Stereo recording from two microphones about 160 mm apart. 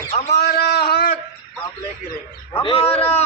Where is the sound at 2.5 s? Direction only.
30° left (ahead or behind).